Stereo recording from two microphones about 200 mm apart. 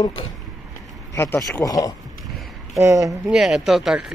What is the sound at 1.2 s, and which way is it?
Speech, 10° left (ahead or behind).